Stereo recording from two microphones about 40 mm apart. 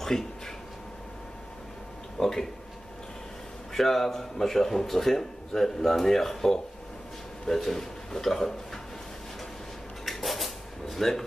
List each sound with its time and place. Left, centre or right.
0.1 s speech: centre
2.1 s speech: centre
3.7 s speech: centre
10.0 s drawer open or close: centre